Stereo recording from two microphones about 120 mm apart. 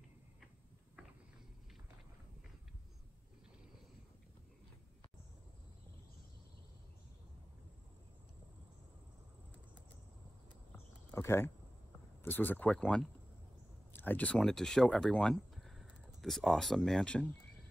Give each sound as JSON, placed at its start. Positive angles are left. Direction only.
{"t": 11.1, "sound": "speech", "side_deg": 20}